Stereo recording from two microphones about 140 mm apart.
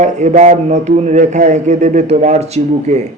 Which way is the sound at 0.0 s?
60° right (ahead or behind).